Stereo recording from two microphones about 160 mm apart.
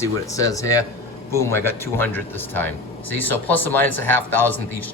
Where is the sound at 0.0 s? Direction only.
20° left (ahead or behind).